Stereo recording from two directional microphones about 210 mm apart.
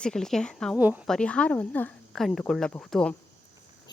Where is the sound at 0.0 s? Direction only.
5° left (ahead or behind).